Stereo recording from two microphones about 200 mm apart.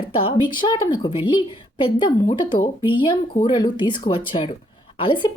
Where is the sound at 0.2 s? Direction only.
25° left (ahead or behind).